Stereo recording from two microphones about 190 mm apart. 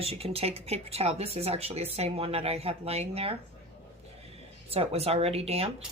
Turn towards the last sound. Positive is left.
turn(degrees=-30)  # may be behind; listen again after turning